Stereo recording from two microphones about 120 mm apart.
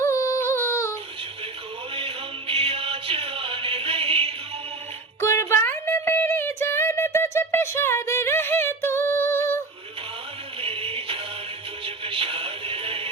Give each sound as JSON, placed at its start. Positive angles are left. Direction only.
{"t": 0.0, "sound": "yodeling", "side_deg": 25}
{"t": 2.0, "sound": "music", "side_deg": -50}
{"t": 5.2, "sound": "a sound", "side_deg": 20}
{"t": 10.6, "sound": "music", "side_deg": -50}